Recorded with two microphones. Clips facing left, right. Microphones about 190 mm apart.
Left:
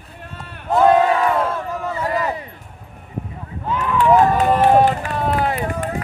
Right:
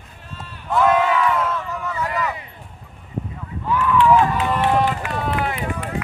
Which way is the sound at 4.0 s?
40° left (ahead or behind).